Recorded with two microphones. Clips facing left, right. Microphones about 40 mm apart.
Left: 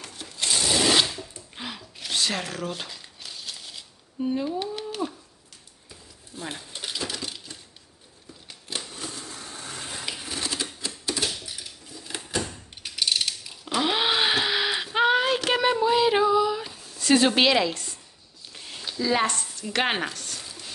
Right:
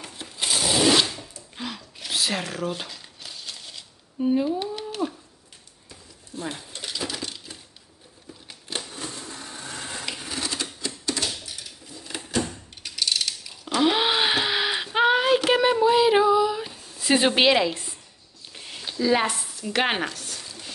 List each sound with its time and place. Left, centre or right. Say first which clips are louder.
0.0 s wood: right 1 dB; centre
1.5 s crumpling: right 4 dB; centre
5.9 s a sound: right 3 dB; centre
8.5 s crumpling: right 1 dB; centre
9.3 s vehicle: right 1 dB; centre
9.8 s typewriter: right 1 dB; centre
11.9 s drawer open or close: right 1 dB; centre
12.8 s mechanisms: even; centre
13.7 s a sound: right 2 dB; centre